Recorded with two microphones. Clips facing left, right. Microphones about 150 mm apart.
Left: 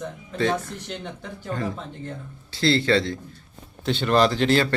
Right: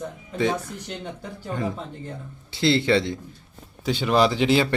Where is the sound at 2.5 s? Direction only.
20° right (ahead or behind).